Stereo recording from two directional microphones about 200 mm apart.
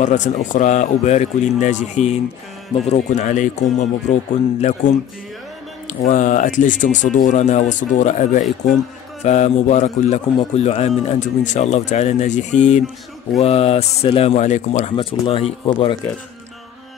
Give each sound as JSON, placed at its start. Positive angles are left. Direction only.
{"t": 0.0, "sound": "speech", "side_deg": 40}